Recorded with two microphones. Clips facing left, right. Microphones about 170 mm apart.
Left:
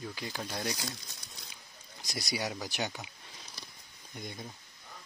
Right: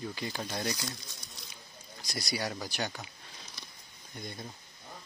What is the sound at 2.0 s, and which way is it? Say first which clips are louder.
Speech: even; 20° left (ahead or behind).